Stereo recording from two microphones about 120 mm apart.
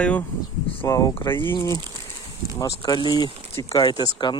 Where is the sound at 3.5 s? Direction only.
25° left (ahead or behind).